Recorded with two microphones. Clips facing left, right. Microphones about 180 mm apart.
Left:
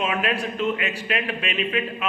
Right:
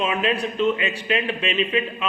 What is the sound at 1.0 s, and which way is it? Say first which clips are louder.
Speech: right 5 dB; 30° right (ahead or behind).